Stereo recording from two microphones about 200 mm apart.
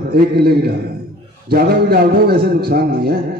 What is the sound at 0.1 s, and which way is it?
A man's voice, 50° right (ahead or behind).